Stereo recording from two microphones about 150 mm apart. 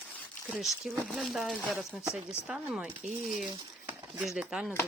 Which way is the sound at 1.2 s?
Centre (ahead or behind).